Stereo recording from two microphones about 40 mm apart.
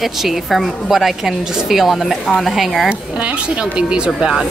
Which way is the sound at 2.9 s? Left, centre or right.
Right.